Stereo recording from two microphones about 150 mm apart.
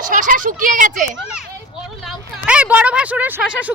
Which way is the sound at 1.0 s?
5° right (ahead or behind).